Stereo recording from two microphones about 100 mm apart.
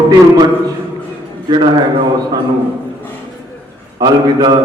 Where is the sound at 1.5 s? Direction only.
50° right (ahead or behind).